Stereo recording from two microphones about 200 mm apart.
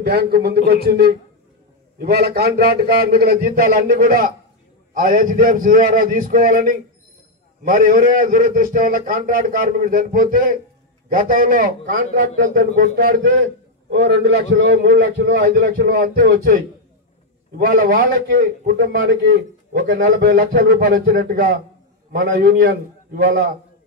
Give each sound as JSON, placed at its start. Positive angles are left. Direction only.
{"t": 0.0, "sound": "a man's voice", "side_deg": -50}
{"t": 13.4, "sound": "a man's voice", "side_deg": -65}
{"t": 15.4, "sound": "a man's voice", "side_deg": -45}
{"t": 20.6, "sound": "a man's voice", "side_deg": -60}